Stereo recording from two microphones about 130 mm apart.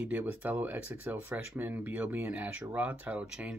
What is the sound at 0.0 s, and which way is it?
Speech, 15° right (ahead or behind).